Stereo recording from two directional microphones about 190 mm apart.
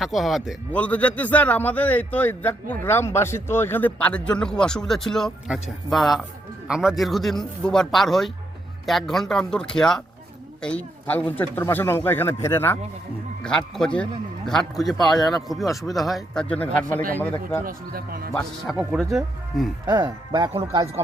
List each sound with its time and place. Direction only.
0.0 s a man's voice: centre (ahead or behind)
17.7 s speech: 50° right (ahead or behind)
18.3 s speech: centre (ahead or behind)
19.9 s speech: 25° right (ahead or behind)